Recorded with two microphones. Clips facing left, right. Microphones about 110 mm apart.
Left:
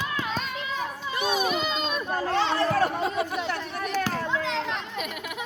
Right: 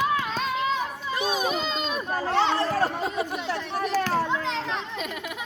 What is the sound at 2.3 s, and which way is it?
Chatter, 20° right (ahead or behind).